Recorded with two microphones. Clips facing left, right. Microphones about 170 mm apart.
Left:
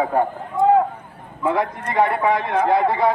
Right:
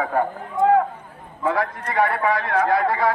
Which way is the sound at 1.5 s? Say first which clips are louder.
Left 2 dB; 20° left (ahead or behind).